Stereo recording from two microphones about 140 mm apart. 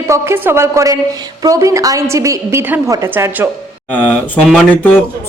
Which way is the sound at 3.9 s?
10° left (ahead or behind).